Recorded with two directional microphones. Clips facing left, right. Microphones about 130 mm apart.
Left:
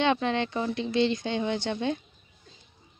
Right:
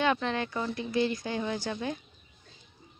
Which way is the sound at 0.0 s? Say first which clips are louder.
Left 3 dB; 20° left (ahead or behind).